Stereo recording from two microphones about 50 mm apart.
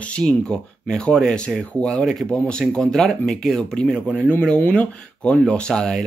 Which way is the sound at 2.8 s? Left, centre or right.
Centre.